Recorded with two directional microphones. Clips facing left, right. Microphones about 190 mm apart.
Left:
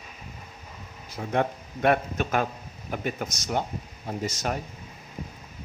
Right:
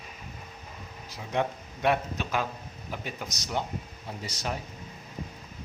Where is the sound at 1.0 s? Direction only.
50° left (ahead or behind).